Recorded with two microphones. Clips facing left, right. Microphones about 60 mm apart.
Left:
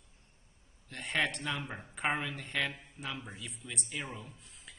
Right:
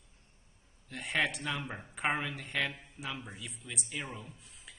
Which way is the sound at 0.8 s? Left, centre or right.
Centre.